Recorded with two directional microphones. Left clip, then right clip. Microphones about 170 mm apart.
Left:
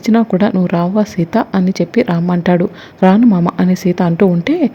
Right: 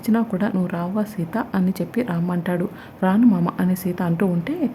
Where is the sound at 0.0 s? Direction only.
25° left (ahead or behind).